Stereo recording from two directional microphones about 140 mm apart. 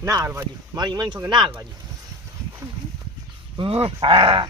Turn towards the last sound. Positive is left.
turn(degrees=-40)  # may be behind; listen again after turning